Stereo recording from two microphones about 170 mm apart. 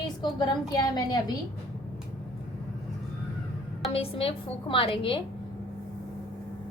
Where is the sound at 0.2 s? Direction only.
25° left (ahead or behind).